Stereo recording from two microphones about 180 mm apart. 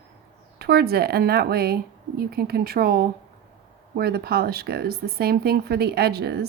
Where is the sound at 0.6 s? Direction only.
60° right (ahead or behind).